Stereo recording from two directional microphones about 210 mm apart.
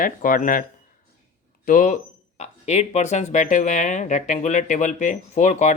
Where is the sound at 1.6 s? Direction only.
40° left (ahead or behind).